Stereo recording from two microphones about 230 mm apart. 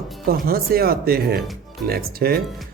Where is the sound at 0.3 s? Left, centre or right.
Right.